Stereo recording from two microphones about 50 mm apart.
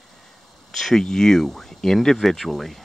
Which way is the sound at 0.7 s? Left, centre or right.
Centre.